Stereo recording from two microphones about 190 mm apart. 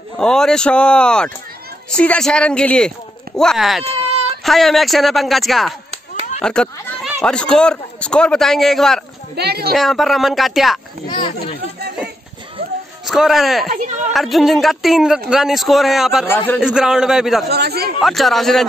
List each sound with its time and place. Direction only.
0.2 s speech: 5° left (ahead or behind)
9.4 s speech: 55° right (ahead or behind)
9.8 s speech: centre (ahead or behind)
11.1 s speech: 25° left (ahead or behind)
13.0 s speech: centre (ahead or behind)
13.7 s a woman's voice: 40° right (ahead or behind)
14.1 s speech: centre (ahead or behind)
17.5 s speech: 60° right (ahead or behind)
18.0 s speech: centre (ahead or behind)